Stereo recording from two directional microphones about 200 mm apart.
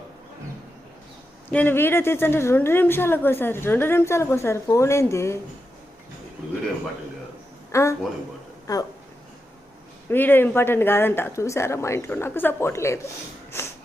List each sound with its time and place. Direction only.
1.5 s a woman's voice: 10° left (ahead or behind)
7.7 s a woman's voice: 15° left (ahead or behind)
10.1 s a woman's voice: 10° left (ahead or behind)